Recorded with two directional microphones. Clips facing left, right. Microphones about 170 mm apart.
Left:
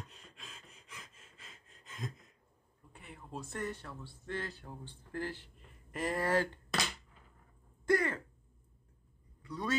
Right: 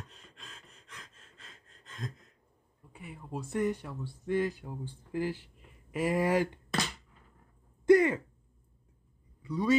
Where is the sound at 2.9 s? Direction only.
5° right (ahead or behind).